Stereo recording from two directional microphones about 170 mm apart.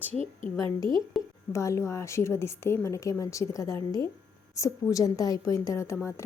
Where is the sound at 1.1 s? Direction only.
Centre (ahead or behind).